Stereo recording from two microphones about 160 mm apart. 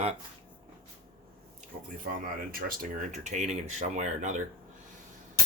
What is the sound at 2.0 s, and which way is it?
Speech, 60° right (ahead or behind).